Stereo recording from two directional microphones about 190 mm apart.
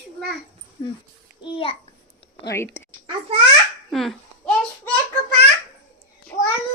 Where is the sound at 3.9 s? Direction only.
Centre (ahead or behind).